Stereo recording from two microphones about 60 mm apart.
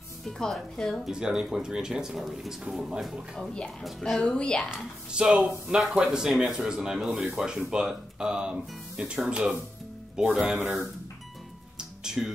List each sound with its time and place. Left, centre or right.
0.2 s speech: centre
1.0 s speech: centre
3.3 s speech: centre
5.1 s speech: centre
12.0 s music: centre